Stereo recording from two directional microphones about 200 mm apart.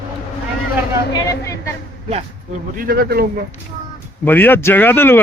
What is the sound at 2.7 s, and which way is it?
Speech, 50° right (ahead or behind).